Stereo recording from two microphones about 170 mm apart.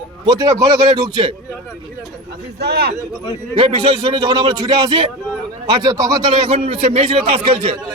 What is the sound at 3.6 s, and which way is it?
A man's voice, 30° right (ahead or behind).